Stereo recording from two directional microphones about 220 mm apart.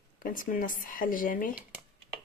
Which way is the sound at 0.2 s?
40° left (ahead or behind).